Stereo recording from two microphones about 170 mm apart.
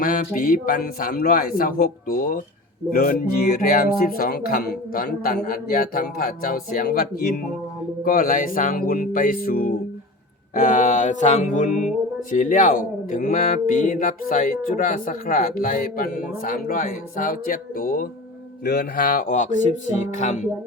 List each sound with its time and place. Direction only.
0.0 s speech: 55° left (ahead or behind)
8.0 s speech: 55° left (ahead or behind)
10.5 s mantra: 50° left (ahead or behind)
14.7 s speech: 55° left (ahead or behind)
18.6 s speech: 65° left (ahead or behind); by 19.5 s 45° left (ahead or behind)
20.1 s mantra: 45° left (ahead or behind)